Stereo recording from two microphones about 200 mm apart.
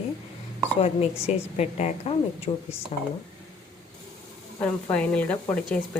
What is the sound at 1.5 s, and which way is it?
Speech, 35° left (ahead or behind).